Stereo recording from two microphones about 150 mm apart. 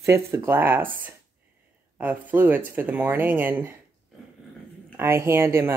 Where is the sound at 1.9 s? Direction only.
10° right (ahead or behind).